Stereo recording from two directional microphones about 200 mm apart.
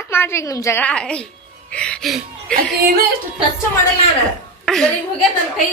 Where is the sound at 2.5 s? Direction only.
50° right (ahead or behind).